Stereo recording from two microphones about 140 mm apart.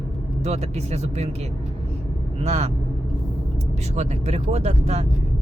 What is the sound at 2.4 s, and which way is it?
Speech, 50° right (ahead or behind).